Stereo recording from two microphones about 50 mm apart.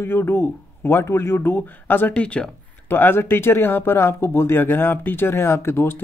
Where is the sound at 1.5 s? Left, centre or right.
Left.